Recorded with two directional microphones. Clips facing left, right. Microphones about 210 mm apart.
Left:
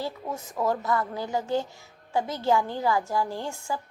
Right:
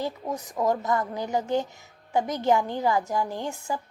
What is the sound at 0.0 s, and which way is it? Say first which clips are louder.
A woman's voice: right 2 dB; 15° right (ahead or behind).